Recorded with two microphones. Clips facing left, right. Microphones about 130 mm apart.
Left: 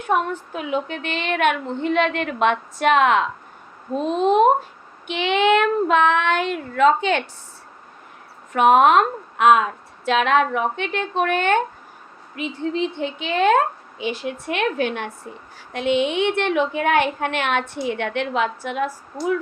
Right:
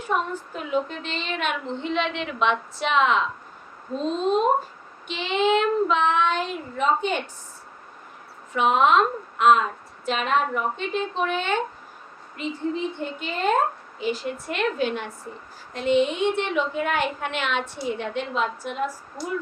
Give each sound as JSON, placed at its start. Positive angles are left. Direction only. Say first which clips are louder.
{"t": 0.0, "sound": "a woman's voice", "louder": "left 4 dB", "side_deg": 75}
{"t": 5.0, "sound": "child singing", "louder": "left 4 dB", "side_deg": 65}
{"t": 8.5, "sound": "a woman's voice", "louder": "left 5 dB", "side_deg": 55}
{"t": 10.1, "sound": "child singing", "louder": "left 5 dB", "side_deg": 85}
{"t": 12.4, "sound": "a woman's voice", "louder": "left 3 dB", "side_deg": 90}
{"t": 15.7, "sound": "child singing", "louder": "left 1 dB", "side_deg": 80}
{"t": 17.8, "sound": "child singing", "louder": "left 4 dB", "side_deg": 70}